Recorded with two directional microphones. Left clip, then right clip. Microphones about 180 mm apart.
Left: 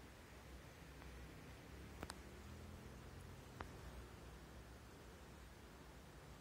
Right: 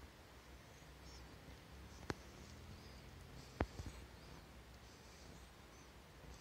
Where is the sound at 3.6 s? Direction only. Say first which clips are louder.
Right 11 dB; 20° left (ahead or behind).